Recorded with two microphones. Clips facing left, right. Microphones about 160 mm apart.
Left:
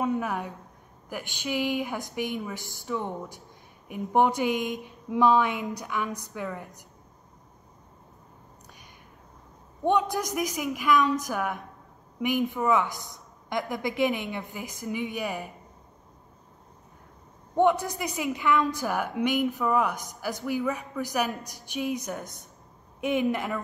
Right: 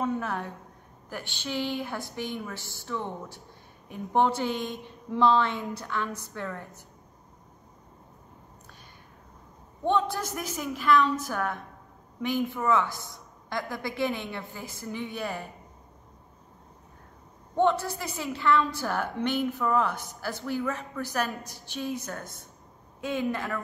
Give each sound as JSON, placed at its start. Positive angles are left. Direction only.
{"t": 0.0, "sound": "a sound", "side_deg": 10}
{"t": 1.1, "sound": "a woman's voice", "side_deg": 10}
{"t": 9.8, "sound": "a woman's voice", "side_deg": 15}
{"t": 17.6, "sound": "a woman's voice", "side_deg": 15}